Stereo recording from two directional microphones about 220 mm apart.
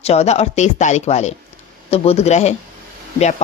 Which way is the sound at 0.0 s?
30° left (ahead or behind).